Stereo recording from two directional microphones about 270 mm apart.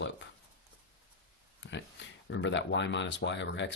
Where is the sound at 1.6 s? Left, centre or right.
Left.